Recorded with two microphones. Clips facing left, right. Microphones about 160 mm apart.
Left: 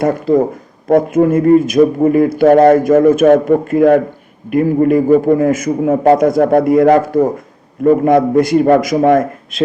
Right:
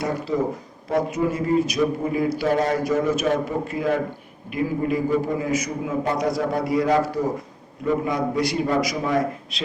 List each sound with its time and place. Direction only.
0.0 s speech: 50° left (ahead or behind)